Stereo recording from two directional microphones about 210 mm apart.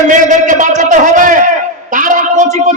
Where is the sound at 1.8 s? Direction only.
40° right (ahead or behind).